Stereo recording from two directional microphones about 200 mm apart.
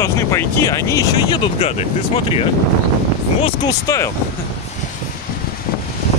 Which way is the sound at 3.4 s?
20° left (ahead or behind).